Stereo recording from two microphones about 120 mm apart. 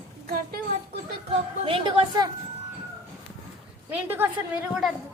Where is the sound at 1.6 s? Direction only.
45° right (ahead or behind).